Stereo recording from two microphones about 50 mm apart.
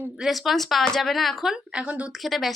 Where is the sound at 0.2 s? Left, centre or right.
Centre.